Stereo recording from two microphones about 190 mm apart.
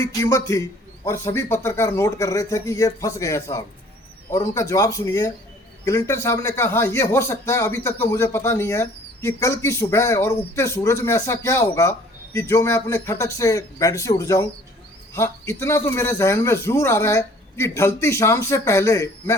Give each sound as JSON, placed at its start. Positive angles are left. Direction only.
{"t": 0.1, "sound": "a man's voice", "side_deg": 15}